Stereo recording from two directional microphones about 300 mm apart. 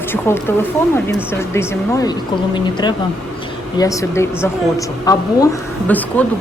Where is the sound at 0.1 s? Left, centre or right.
Centre.